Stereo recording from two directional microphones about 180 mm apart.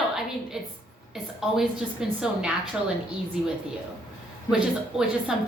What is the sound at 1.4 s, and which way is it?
A woman's voice, centre (ahead or behind).